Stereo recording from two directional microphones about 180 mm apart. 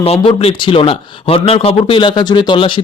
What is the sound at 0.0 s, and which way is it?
Speech, 35° left (ahead or behind).